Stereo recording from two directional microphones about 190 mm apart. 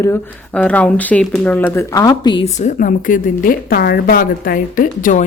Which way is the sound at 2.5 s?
40° left (ahead or behind).